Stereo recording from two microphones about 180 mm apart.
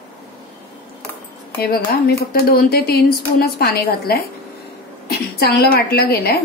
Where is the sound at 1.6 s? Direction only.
55° left (ahead or behind).